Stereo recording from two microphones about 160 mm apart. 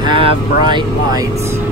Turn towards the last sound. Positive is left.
turn(degrees=-30)  # may be behind; listen again after turning